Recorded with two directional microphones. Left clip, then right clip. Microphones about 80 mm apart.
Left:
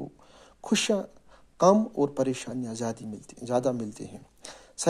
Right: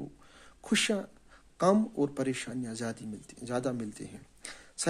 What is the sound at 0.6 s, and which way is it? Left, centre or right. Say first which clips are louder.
Speech: left 3 dB; left.